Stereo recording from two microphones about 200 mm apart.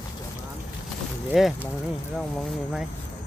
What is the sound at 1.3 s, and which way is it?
Speech, centre (ahead or behind).